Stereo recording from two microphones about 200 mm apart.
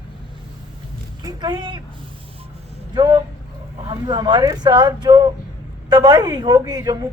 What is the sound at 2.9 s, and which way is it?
Speech, 20° right (ahead or behind).